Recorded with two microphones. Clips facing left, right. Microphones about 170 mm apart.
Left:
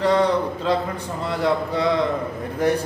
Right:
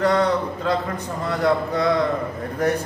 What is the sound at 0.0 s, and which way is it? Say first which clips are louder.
A man's voice: left 1 dB; 15° left (ahead or behind).